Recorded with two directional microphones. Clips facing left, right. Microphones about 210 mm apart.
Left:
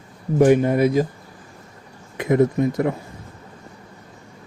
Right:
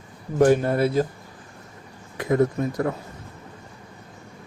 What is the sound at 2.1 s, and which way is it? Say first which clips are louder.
Speech: left 3 dB; 20° left (ahead or behind).